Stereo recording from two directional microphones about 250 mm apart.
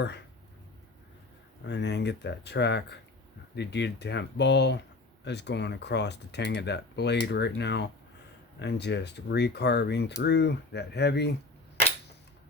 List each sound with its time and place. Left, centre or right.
1.6 s speech: left